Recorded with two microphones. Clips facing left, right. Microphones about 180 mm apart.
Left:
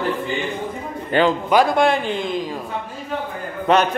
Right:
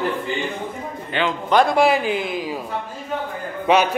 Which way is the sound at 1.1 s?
45° left (ahead or behind).